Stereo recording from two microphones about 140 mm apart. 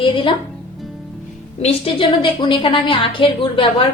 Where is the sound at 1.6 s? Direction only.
40° left (ahead or behind).